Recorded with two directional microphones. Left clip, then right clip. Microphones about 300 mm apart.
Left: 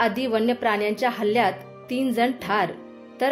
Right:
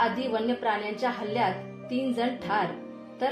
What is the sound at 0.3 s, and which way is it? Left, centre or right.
Speech, left.